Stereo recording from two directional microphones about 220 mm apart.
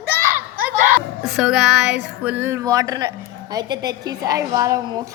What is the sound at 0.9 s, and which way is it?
Speech, centre (ahead or behind).